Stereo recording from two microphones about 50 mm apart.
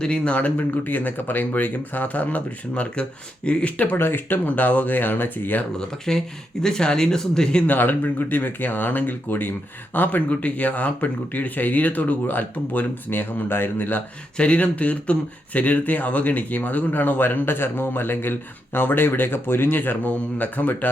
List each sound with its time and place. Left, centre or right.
0.0 s speech: left
3.9 s speech: left
6.1 s speech: centre
7.7 s speech: left
14.3 s a man's voice: left